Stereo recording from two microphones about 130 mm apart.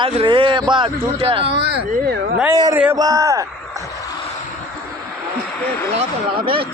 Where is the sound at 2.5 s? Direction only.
30° right (ahead or behind).